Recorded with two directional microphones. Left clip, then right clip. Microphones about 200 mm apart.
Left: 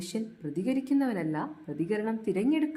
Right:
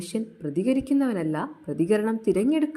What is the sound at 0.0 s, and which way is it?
A woman's voice, 20° right (ahead or behind).